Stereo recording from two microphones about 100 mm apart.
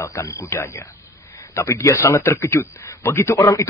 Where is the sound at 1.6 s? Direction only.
30° left (ahead or behind).